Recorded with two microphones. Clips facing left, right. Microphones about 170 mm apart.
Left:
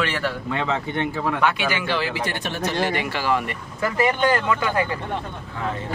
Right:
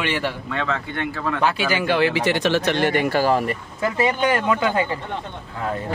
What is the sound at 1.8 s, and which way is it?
Speech, 60° right (ahead or behind).